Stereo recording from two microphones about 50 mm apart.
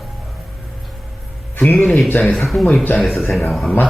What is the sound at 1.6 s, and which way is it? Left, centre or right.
Speech, left.